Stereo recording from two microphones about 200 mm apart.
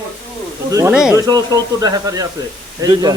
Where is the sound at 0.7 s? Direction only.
15° right (ahead or behind).